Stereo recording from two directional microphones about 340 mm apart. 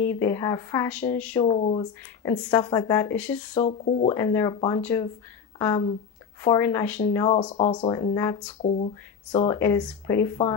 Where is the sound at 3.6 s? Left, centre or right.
Centre.